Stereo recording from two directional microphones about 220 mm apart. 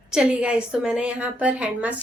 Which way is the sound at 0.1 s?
5° right (ahead or behind).